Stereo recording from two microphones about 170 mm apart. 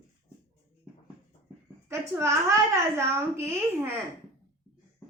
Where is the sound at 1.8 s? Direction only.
15° right (ahead or behind).